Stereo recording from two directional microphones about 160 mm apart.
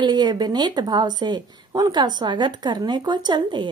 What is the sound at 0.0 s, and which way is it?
A woman's voice, 25° right (ahead or behind).